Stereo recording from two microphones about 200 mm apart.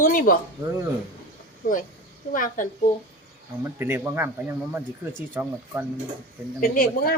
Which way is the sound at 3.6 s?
10° right (ahead or behind).